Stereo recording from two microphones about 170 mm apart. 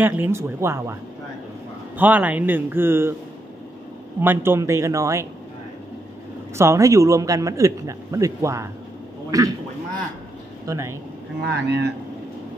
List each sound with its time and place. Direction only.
0.0 s a man's voice: 10° right (ahead or behind)
2.0 s a man's voice: 10° right (ahead or behind)
4.2 s a man's voice: 15° right (ahead or behind)
6.6 s a man's voice: 20° right (ahead or behind)
10.7 s a man's voice: 15° right (ahead or behind)
11.4 s speech: 90° right